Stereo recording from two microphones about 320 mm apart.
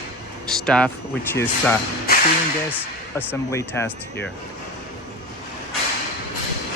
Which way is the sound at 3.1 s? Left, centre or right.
Centre.